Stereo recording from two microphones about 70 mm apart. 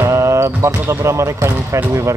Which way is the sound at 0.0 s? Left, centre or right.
Right.